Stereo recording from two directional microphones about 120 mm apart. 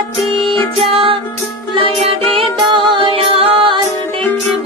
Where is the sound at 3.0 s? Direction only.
50° right (ahead or behind).